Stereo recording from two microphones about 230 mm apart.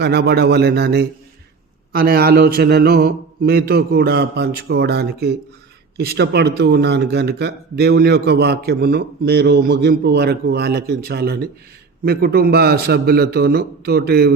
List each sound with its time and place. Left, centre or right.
0.0 s a man's voice: right